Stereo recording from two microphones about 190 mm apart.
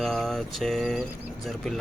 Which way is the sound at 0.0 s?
Centre (ahead or behind).